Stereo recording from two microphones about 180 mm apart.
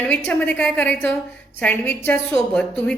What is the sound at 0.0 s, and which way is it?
A woman's voice, 5° left (ahead or behind).